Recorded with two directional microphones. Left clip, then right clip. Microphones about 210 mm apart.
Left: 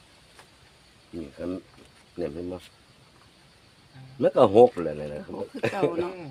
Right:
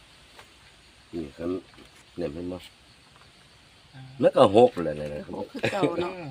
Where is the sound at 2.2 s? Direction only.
35° left (ahead or behind).